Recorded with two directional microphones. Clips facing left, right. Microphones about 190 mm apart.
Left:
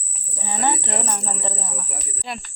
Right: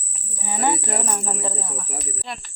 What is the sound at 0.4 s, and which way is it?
Speech, 10° right (ahead or behind).